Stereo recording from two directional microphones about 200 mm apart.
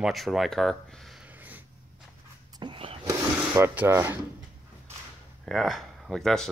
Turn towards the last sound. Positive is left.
turn(degrees=0)  # may be behind; listen again after turning